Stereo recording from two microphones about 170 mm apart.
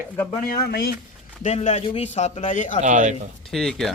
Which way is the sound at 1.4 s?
40° left (ahead or behind).